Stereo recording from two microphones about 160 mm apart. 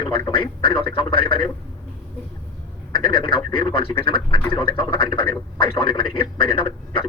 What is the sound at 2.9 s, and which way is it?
A man's voice, 35° left (ahead or behind).